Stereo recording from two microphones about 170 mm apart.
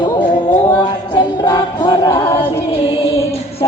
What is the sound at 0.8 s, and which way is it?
Music, 25° left (ahead or behind).